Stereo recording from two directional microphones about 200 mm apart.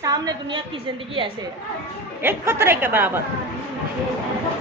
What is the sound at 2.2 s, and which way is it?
Speech, 10° right (ahead or behind).